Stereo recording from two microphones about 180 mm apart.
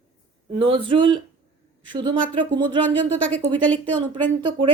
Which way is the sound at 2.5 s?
25° right (ahead or behind).